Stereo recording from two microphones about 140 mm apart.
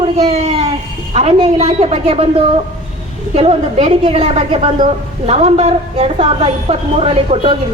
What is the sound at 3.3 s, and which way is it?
A woman's voice, 50° right (ahead or behind).